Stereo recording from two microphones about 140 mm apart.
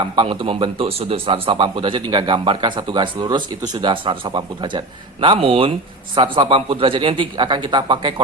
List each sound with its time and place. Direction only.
0.2 s speech: 40° right (ahead or behind)